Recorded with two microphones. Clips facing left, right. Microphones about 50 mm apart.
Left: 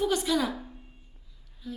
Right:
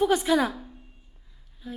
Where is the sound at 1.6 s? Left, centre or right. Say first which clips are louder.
Right 1 dB; right.